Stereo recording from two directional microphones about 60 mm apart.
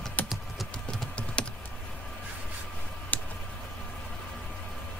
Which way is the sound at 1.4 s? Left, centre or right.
Centre.